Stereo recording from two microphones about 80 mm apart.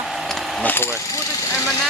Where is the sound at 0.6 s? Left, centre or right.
Left.